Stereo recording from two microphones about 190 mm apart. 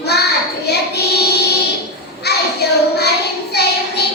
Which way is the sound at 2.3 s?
60° left (ahead or behind).